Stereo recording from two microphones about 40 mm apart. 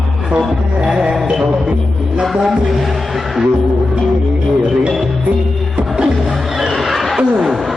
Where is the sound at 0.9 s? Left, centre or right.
Centre.